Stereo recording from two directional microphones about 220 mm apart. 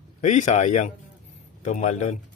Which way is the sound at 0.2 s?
35° left (ahead or behind).